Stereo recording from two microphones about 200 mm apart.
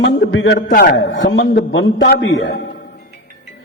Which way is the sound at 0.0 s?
65° left (ahead or behind).